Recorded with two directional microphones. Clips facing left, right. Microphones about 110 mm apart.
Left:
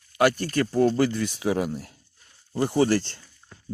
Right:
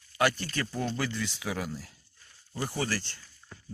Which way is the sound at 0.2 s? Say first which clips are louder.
Left 7 dB; 45° left (ahead or behind).